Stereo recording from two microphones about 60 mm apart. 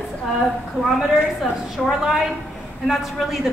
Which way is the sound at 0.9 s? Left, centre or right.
Centre.